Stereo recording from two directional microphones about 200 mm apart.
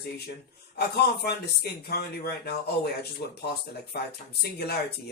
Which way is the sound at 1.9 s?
50° left (ahead or behind).